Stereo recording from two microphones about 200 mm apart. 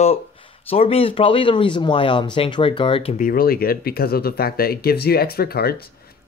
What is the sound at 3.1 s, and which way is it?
Speech, 45° left (ahead or behind).